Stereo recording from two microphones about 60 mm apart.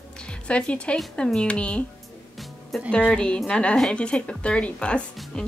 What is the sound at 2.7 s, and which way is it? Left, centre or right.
Speech, centre.